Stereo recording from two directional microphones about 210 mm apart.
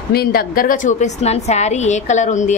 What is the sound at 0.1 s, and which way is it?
A woman's voice, 45° left (ahead or behind).